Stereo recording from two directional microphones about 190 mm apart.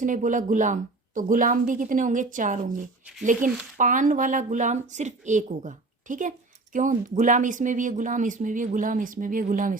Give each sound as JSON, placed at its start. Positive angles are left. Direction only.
{"t": 0.0, "sound": "speech", "side_deg": -45}
{"t": 3.8, "sound": "speech", "side_deg": -45}